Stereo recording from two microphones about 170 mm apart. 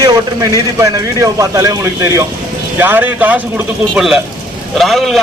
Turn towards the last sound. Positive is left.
turn(degrees=0)  # may be behind; listen again after turning